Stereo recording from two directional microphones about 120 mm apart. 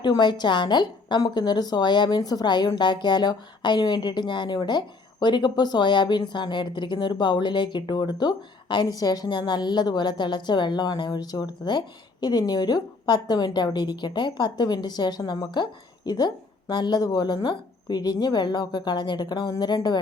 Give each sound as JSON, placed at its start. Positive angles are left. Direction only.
{"t": 0.0, "sound": "speech", "side_deg": 40}